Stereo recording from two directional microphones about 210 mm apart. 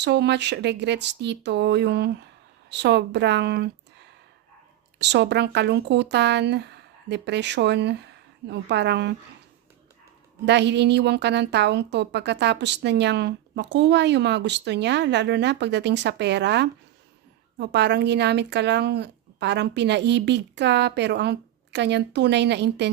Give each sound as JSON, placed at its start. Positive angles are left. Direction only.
{"t": 0.0, "sound": "a woman's voice", "side_deg": -55}
{"t": 10.4, "sound": "a woman's voice", "side_deg": -55}